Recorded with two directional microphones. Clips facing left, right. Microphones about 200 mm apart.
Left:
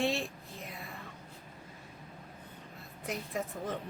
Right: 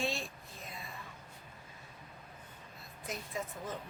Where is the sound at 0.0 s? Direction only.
65° left (ahead or behind).